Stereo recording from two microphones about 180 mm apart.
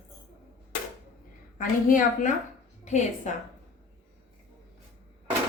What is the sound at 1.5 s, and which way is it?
A woman's voice, 45° left (ahead or behind).